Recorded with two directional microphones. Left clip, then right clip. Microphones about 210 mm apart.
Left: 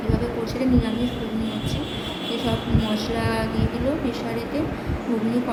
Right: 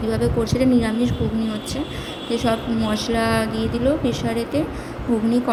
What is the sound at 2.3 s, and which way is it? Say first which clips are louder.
A woman's voice: right 5 dB; 35° right (ahead or behind).